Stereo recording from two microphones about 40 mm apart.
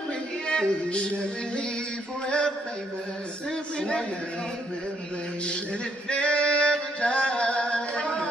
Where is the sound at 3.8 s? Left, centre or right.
Left.